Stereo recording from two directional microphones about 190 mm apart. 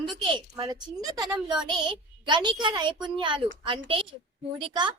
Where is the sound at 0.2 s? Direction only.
25° right (ahead or behind).